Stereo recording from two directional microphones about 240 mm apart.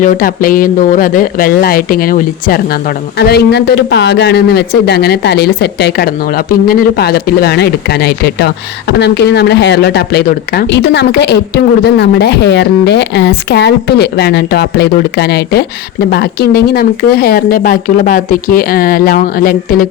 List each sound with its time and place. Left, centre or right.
0.0 s a man's voice: left